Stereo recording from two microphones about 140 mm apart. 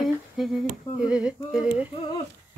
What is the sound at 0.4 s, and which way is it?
Speech, centre (ahead or behind).